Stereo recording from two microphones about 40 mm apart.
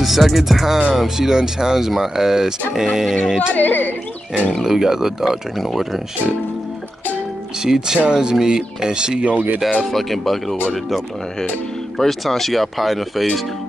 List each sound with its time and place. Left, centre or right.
0.0 s speech: centre
3.5 s speech: left
4.6 s speech: centre
7.6 s speech: centre
9.2 s speech: right
9.8 s speech: centre
12.0 s speech: centre